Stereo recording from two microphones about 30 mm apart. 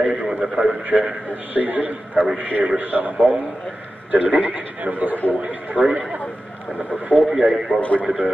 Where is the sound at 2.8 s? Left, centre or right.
Right.